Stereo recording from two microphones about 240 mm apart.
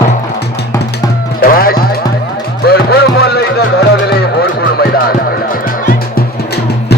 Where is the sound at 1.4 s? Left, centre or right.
Left.